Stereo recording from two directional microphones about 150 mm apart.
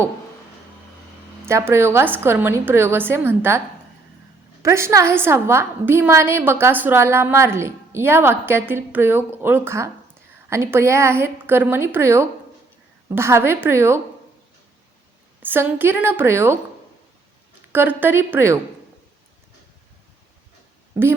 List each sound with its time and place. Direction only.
1.5 s a woman's voice: 15° right (ahead or behind)
4.6 s a woman's voice: 20° right (ahead or behind)
15.4 s a woman's voice: 10° right (ahead or behind)
17.7 s a woman's voice: 15° right (ahead or behind)